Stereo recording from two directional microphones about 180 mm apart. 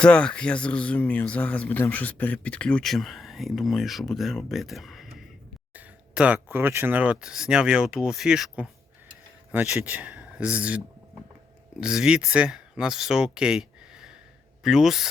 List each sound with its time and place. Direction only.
0.0 s speech: 5° left (ahead or behind)